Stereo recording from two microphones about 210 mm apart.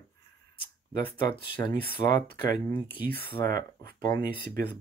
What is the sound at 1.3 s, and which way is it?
Speech, 20° left (ahead or behind).